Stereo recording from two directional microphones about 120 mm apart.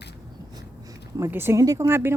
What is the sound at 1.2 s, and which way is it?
Speech, 20° right (ahead or behind).